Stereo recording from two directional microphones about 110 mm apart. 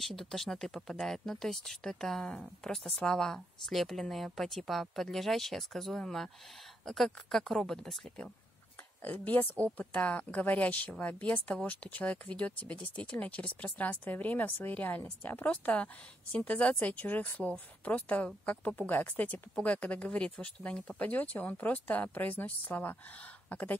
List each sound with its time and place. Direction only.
0.0 s speech: centre (ahead or behind)